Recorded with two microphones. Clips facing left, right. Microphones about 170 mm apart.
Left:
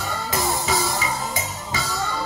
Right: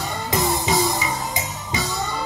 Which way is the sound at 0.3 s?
20° right (ahead or behind).